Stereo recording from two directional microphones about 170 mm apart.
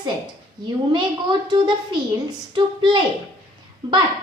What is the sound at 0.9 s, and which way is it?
A woman's voice, 25° right (ahead or behind).